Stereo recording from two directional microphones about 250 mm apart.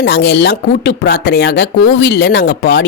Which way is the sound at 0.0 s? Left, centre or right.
Left.